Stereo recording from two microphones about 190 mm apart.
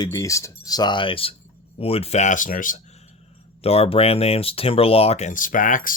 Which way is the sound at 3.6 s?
30° left (ahead or behind).